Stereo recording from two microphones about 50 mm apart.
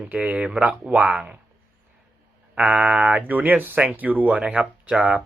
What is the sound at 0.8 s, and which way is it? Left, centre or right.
Speech, right.